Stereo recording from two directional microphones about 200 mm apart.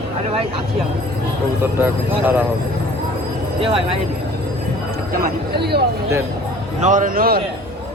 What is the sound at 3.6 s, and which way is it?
Speech, 30° right (ahead or behind).